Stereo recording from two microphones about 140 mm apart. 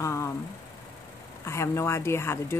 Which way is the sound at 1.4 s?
20° left (ahead or behind).